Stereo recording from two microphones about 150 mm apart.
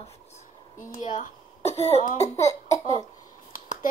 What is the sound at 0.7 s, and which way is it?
Speech, 60° left (ahead or behind).